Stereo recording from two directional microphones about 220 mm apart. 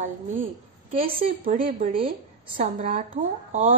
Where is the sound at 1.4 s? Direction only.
40° right (ahead or behind).